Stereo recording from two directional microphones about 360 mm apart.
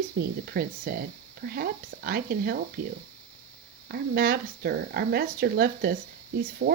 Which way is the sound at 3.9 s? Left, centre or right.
Right.